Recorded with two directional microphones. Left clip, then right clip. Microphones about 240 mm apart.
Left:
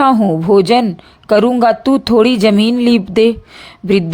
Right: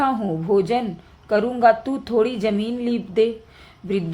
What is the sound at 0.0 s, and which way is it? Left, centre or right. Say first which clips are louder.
A woman's voice: left 10 dB; left.